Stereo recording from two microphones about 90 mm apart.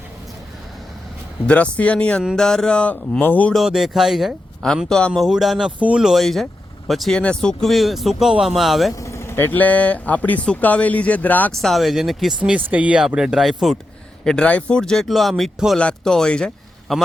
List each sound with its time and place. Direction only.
1.5 s speech: 15° left (ahead or behind)
3.5 s speech: 5° right (ahead or behind)
9.0 s speech: 35° left (ahead or behind)
11.5 s speech: centre (ahead or behind)
12.4 s speech: 15° right (ahead or behind)
14.3 s speech: 10° left (ahead or behind)
15.8 s speech: 10° left (ahead or behind)